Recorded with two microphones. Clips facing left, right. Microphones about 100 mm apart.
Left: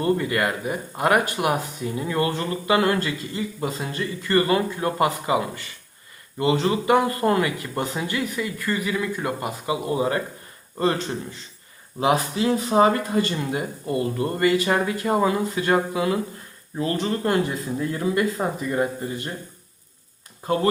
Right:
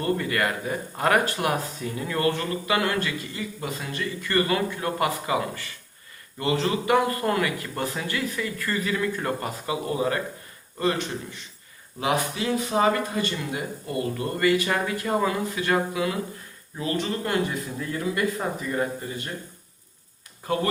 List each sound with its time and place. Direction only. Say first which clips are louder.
0.0 s speech: left 3 dB; 25° left (ahead or behind)
11.9 s speech: left 4 dB; 25° left (ahead or behind)